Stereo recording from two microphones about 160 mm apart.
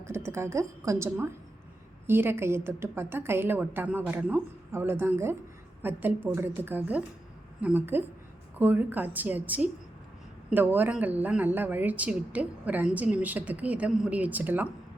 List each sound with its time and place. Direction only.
0.0 s speech: 15° right (ahead or behind)